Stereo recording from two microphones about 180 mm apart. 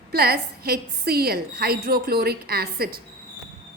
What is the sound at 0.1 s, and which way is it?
A woman's voice, 60° right (ahead or behind).